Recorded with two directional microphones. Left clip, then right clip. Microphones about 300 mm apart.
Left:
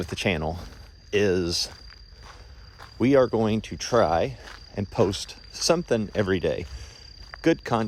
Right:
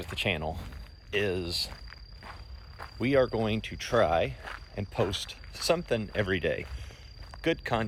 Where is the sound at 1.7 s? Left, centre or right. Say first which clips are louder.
Left 1 dB; centre.